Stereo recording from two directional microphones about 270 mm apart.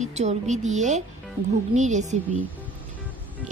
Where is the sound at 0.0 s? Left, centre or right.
Right.